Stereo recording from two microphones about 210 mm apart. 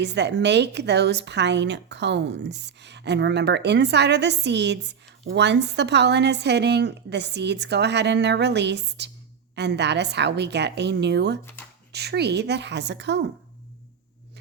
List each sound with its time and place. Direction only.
0.0 s a woman's voice: 55° right (ahead or behind)